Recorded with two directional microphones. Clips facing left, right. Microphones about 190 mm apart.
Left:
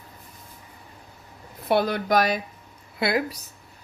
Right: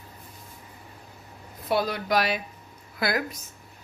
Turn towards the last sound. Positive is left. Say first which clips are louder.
# left 3 dB
turn(degrees=30)  # may be behind; listen again after turning